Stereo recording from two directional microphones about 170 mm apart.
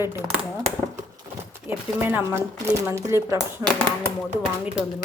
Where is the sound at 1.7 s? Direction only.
15° right (ahead or behind).